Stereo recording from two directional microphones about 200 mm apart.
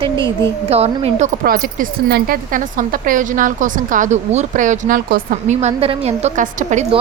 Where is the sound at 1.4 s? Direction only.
45° right (ahead or behind).